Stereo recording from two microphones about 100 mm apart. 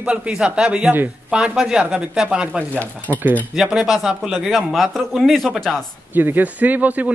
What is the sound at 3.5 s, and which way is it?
A man's voice, 5° right (ahead or behind).